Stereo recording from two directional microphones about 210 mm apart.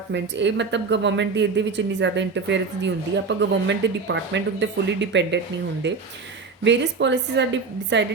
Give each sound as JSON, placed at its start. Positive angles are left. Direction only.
{"t": 0.1, "sound": "speech", "side_deg": -55}